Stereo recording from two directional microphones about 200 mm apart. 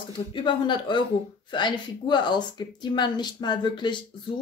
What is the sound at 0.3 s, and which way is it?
Speech, 25° left (ahead or behind).